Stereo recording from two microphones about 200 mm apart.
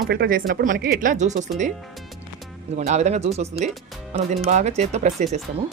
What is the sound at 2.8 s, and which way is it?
Speech, 35° right (ahead or behind).